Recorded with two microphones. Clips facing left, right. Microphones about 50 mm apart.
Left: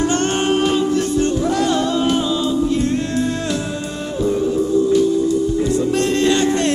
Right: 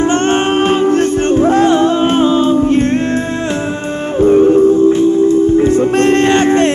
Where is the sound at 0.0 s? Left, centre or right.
Right.